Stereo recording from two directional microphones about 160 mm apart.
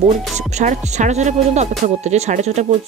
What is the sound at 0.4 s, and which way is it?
Speech, 45° right (ahead or behind).